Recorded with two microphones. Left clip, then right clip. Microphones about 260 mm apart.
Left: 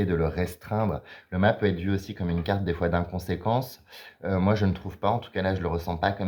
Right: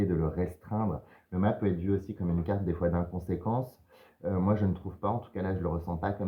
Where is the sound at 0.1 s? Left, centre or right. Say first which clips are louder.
Left 5 dB; left.